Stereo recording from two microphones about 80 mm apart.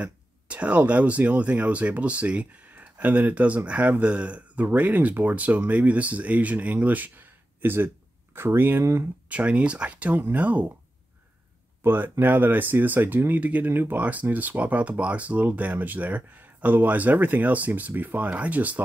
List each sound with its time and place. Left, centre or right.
0.0 s speech: centre
11.8 s speech: right